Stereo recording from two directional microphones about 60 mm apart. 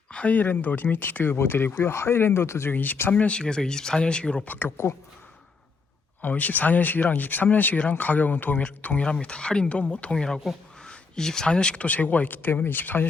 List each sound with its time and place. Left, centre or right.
0.1 s speech: left
2.7 s speech: left; by 4.4 s centre
4.4 s speech: left
6.2 s speech: left